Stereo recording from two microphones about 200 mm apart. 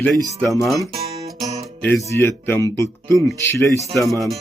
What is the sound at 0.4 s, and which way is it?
Speech, 15° left (ahead or behind).